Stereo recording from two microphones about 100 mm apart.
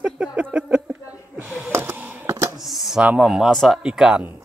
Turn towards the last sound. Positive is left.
turn(degrees=-5)  # may be behind; listen again after turning